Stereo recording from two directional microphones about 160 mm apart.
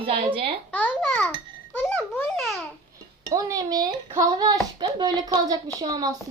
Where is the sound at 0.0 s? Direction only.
35° right (ahead or behind).